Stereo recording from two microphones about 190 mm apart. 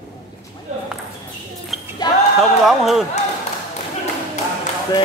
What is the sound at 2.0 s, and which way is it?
Basketball bounce, 20° left (ahead or behind).